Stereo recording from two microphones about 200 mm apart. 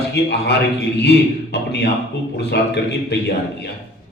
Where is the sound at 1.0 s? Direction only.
55° left (ahead or behind).